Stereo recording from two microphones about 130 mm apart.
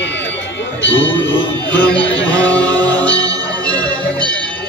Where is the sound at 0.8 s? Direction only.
15° left (ahead or behind).